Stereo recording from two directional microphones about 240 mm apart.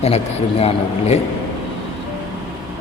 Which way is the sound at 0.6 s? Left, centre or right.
Left.